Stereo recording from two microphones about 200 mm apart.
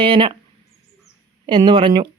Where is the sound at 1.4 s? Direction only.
25° right (ahead or behind).